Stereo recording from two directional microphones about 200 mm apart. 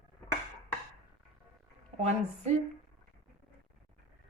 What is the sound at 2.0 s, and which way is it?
Speech, 35° right (ahead or behind).